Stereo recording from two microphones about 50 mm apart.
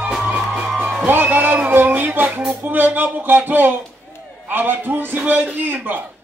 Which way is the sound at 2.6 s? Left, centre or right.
Right.